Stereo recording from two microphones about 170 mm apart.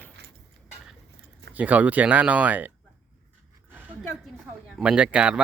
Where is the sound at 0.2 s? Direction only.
80° right.